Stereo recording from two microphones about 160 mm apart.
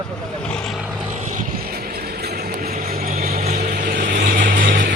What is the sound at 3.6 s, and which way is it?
Vehicle, 60° right (ahead or behind).